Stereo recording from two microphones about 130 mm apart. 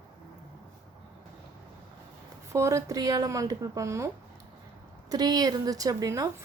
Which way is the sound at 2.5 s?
25° right (ahead or behind).